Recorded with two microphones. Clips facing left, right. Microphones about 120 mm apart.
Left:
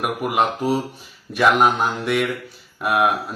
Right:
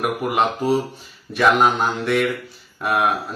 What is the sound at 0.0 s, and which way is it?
A man's voice, 5° left (ahead or behind).